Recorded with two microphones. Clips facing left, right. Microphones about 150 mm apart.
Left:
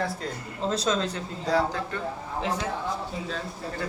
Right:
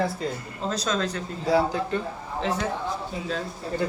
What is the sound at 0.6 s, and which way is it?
Speech, 25° left (ahead or behind).